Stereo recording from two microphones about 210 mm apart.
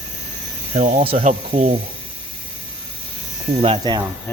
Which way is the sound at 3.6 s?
25° right (ahead or behind).